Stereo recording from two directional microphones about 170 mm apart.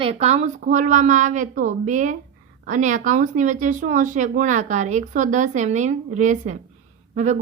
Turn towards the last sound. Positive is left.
turn(degrees=-45)  # may be behind; listen again after turning